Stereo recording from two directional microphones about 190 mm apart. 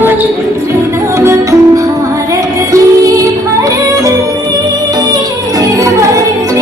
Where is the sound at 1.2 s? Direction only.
15° right (ahead or behind).